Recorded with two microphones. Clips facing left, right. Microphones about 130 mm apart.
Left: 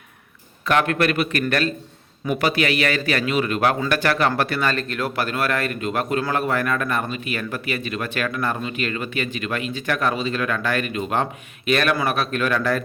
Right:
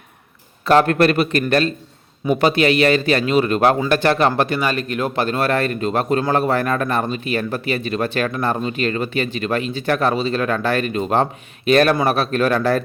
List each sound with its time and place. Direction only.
0.6 s a man's voice: 35° right (ahead or behind)